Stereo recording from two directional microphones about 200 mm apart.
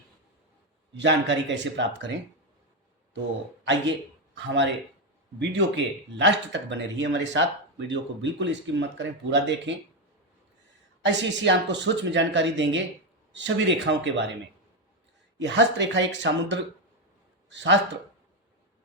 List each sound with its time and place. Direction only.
0.9 s speech: 65° right (ahead or behind)
4.4 s speech: 65° right (ahead or behind)
11.0 s speech: 65° right (ahead or behind)
15.4 s speech: 65° right (ahead or behind)